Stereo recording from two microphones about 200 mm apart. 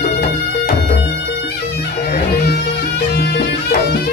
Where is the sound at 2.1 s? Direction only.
55° left (ahead or behind).